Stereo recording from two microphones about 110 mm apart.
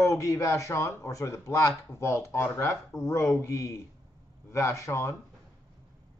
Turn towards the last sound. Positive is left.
turn(degrees=25)  # may be behind; listen again after turning